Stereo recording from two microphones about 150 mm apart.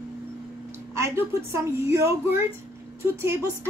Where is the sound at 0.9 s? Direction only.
20° right (ahead or behind).